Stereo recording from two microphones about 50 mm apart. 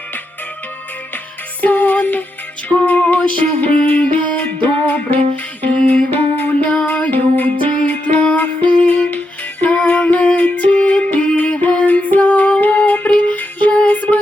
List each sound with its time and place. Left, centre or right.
1.6 s music: left